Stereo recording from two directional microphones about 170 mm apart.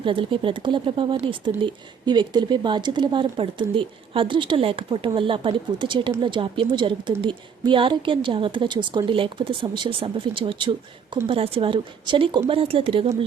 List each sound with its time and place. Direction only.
0.0 s a woman's voice: 30° right (ahead or behind)